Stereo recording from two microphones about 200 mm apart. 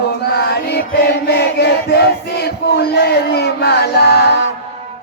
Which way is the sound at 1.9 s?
55° left (ahead or behind).